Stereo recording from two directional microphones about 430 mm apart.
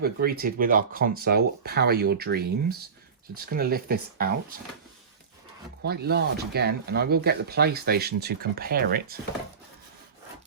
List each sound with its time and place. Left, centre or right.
0.0 s speech: right
5.8 s speech: right